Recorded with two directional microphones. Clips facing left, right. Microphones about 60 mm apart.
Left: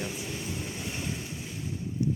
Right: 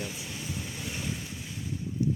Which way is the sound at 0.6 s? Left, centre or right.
Left.